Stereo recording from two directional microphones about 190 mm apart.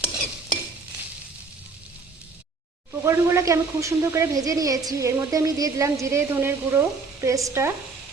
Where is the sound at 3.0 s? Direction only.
15° right (ahead or behind).